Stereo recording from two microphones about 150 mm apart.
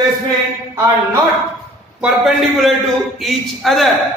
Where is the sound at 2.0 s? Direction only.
Centre (ahead or behind).